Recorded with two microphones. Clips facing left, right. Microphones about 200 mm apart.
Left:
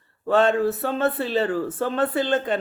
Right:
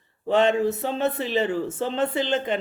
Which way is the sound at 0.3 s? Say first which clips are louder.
Left 1 dB; 15° right (ahead or behind).